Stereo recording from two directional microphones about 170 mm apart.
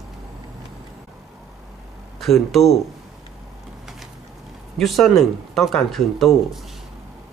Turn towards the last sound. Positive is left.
turn(degrees=0)  # may be behind; listen again after turning